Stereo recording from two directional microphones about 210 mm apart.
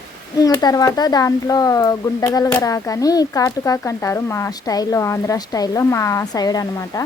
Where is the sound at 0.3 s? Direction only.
15° left (ahead or behind).